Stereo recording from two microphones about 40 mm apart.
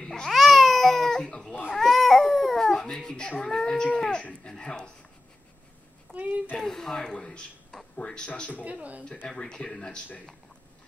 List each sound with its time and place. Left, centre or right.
0.0 s babbling: centre
0.3 s baby cry: centre
2.6 s babbling: centre
3.4 s speech: centre
6.1 s speech: right
6.5 s a man's voice: centre
8.6 s speech: right
9.3 s speech: centre